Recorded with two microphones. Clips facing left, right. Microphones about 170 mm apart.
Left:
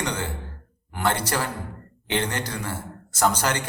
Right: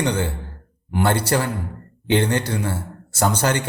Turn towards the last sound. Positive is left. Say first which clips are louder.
# right 3 dB
turn(degrees=-30)  # may be behind; listen again after turning